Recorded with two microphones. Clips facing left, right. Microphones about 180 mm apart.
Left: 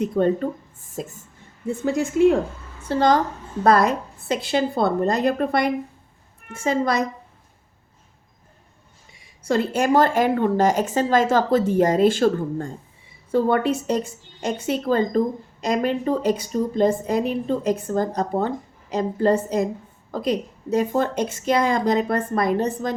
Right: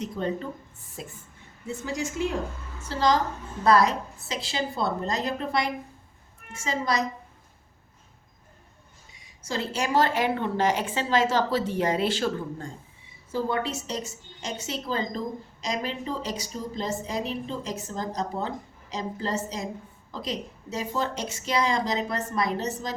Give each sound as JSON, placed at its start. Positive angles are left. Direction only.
{"t": 0.0, "sound": "a woman's voice", "side_deg": 55}
{"t": 9.5, "sound": "a woman's voice", "side_deg": 55}